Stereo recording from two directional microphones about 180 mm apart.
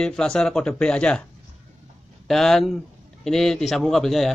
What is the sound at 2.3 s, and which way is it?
Speech, 5° left (ahead or behind).